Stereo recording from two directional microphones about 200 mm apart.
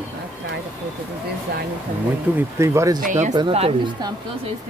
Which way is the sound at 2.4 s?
15° right (ahead or behind).